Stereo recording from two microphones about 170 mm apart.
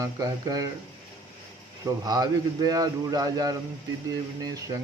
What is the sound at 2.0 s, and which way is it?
Speech, 20° right (ahead or behind).